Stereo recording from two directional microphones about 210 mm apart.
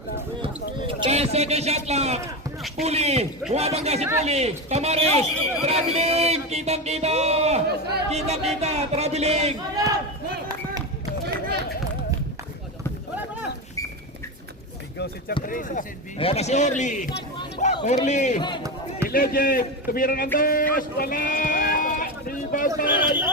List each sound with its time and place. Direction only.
0.9 s music: 25° right (ahead or behind)
7.7 s a man's voice: 50° right (ahead or behind)
8.1 s music: 30° right (ahead or behind)
9.7 s a sound: 15° right (ahead or behind)
14.9 s a man's voice: 50° left (ahead or behind)
16.1 s a man's voice: 30° left (ahead or behind)
18.3 s speech: 20° left (ahead or behind)
19.0 s a man's voice: 45° left (ahead or behind)
20.7 s a sound: 40° left (ahead or behind)
22.7 s a sound: 10° right (ahead or behind)